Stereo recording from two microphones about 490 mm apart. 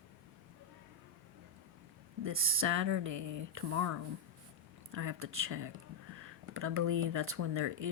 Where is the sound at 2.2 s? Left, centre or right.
Right.